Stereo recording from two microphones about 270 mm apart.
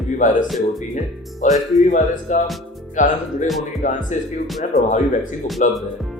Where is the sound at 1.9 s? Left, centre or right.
Left.